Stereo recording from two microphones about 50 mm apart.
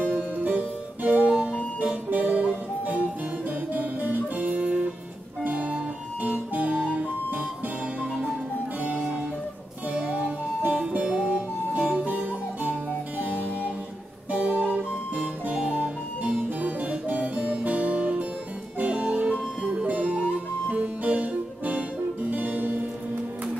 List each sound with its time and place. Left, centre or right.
0.0 s music: right
6.2 s guitar: right
8.0 s music: right